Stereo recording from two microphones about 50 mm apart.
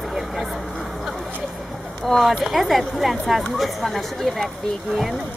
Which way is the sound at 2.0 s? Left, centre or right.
Centre.